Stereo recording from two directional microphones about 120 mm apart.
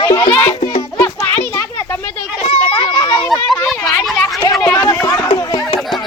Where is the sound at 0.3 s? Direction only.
15° left (ahead or behind).